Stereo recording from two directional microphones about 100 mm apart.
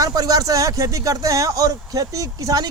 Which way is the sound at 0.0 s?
40° right (ahead or behind).